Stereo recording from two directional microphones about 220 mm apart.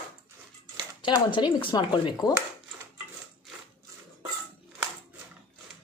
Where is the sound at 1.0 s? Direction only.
20° left (ahead or behind).